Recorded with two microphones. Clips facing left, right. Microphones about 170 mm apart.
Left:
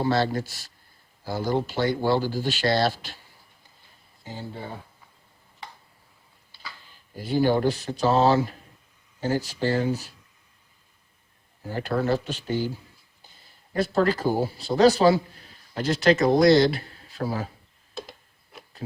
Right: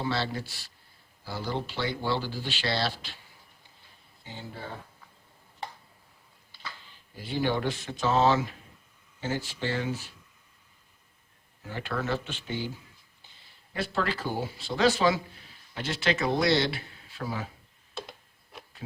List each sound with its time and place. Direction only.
0.0 s speech: 45° left (ahead or behind)
4.2 s speech: 40° left (ahead or behind)
4.5 s speech: 15° left (ahead or behind)
7.2 s a man's voice: 40° left (ahead or behind)
11.6 s a man's voice: 40° left (ahead or behind)
13.7 s a man's voice: 40° left (ahead or behind)